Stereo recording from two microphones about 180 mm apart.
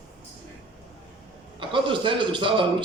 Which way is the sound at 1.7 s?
30° right (ahead or behind).